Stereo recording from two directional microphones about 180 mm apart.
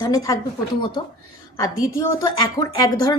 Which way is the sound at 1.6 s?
20° left (ahead or behind).